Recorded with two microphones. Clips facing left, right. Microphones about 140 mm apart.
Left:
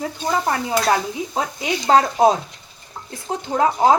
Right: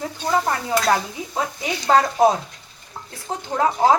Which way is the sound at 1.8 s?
20° left (ahead or behind).